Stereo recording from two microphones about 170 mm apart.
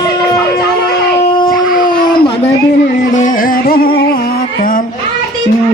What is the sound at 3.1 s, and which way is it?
Music, 50° left (ahead or behind).